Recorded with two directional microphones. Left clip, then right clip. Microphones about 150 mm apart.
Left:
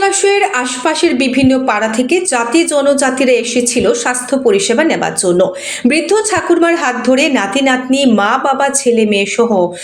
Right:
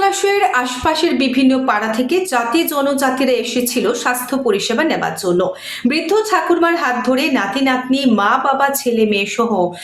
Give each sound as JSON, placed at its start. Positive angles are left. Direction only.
{"t": 0.0, "sound": "a woman's voice", "side_deg": 15}